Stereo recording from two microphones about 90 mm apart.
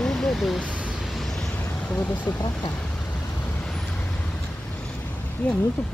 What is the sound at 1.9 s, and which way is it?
Speech, 15° left (ahead or behind).